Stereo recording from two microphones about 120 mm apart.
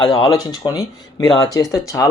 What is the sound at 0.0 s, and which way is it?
Speech, 40° left (ahead or behind).